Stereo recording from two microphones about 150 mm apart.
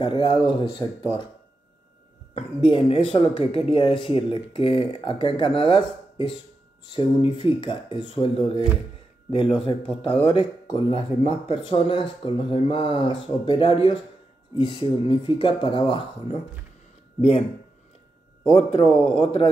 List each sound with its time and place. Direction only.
0.0 s speech: 35° left (ahead or behind)
2.3 s speech: 35° left (ahead or behind)
9.6 s speech: 40° left (ahead or behind)
18.7 s speech: 40° left (ahead or behind)